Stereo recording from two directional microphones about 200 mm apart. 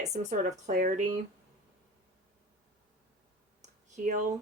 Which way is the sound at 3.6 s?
35° right (ahead or behind).